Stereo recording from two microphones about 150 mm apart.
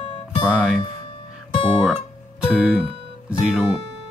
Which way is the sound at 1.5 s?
35° left (ahead or behind).